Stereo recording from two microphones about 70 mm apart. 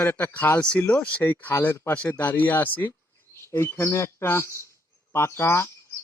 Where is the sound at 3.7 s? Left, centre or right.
Left.